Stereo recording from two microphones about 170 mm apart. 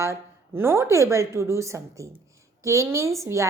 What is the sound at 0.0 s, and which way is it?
Speech, 15° right (ahead or behind).